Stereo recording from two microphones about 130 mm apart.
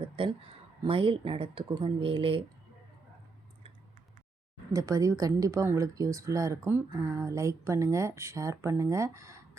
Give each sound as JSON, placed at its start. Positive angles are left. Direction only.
{"t": 0.0, "sound": "a sound", "side_deg": -40}
{"t": 0.9, "sound": "speech", "side_deg": -45}
{"t": 4.7, "sound": "speech", "side_deg": -25}